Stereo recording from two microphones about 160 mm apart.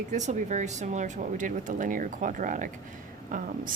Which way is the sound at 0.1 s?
50° right (ahead or behind).